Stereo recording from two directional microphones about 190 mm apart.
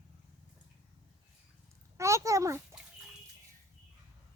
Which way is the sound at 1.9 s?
15° right (ahead or behind).